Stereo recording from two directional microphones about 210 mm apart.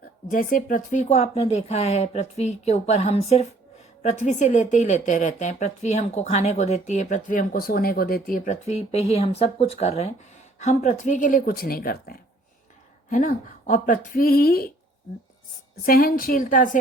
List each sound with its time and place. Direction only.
0.3 s speech: 40° left (ahead or behind)
15.8 s a woman's voice: 45° left (ahead or behind)